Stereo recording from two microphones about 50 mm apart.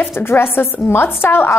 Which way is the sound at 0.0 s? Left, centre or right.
Left.